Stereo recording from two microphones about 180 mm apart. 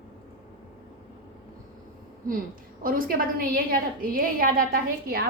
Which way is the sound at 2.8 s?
50° right (ahead or behind).